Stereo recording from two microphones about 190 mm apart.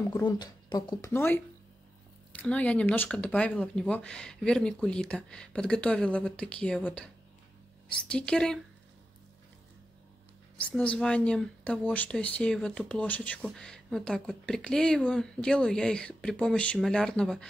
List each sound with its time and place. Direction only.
0.2 s speech: 20° left (ahead or behind); by 8.5 s 5° left (ahead or behind)
10.6 s speech: 5° left (ahead or behind)